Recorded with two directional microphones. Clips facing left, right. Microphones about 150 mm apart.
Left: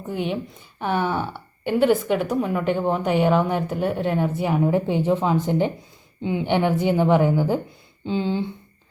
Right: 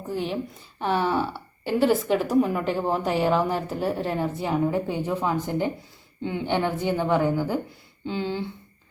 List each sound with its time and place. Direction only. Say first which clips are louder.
0.1 s a woman's voice: left 2 dB; centre (ahead or behind); by 8.4 s 20° left (ahead or behind)